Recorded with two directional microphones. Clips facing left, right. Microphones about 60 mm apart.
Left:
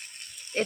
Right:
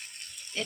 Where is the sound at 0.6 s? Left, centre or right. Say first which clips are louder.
Left 7 dB; left.